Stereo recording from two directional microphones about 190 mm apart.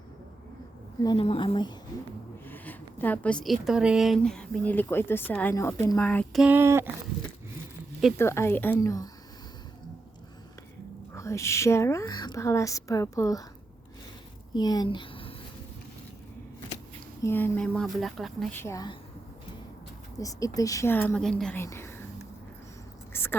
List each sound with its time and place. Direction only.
1.0 s a woman's voice: 25° left (ahead or behind)
2.5 s speech: 10° left (ahead or behind)
6.4 s a sound: 10° right (ahead or behind)
8.1 s speech: 15° left (ahead or behind)
11.1 s speech: 15° left (ahead or behind)
14.5 s speech: 20° left (ahead or behind)
17.2 s speech: 10° left (ahead or behind)
18.6 s speech: 20° left (ahead or behind)
20.1 s speech: 20° left (ahead or behind)
23.1 s a sound: 10° left (ahead or behind)